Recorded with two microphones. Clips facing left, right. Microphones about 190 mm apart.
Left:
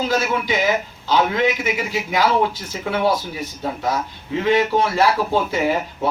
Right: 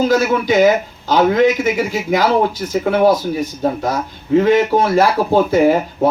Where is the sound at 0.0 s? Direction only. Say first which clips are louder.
Right 6 dB; 45° right (ahead or behind).